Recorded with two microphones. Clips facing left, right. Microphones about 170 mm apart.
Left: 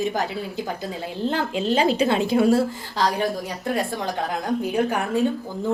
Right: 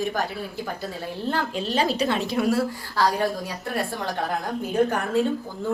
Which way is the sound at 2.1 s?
30° left (ahead or behind).